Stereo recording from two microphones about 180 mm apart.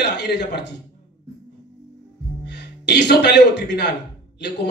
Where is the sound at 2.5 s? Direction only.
70° left (ahead or behind).